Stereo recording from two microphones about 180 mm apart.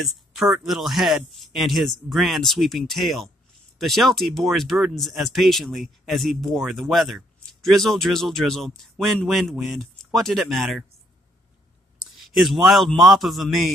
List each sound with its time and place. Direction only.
0.0 s speech: centre (ahead or behind)
12.0 s a man's voice: centre (ahead or behind)